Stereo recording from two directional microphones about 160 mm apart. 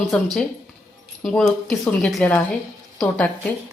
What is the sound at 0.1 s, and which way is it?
A woman's voice, 5° left (ahead or behind).